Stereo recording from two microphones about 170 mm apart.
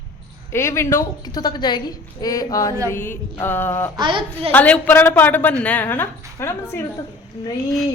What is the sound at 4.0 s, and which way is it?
Speech, 30° right (ahead or behind).